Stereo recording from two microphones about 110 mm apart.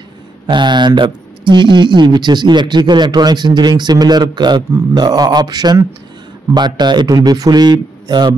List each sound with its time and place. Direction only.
0.5 s a man's voice: 45° right (ahead or behind)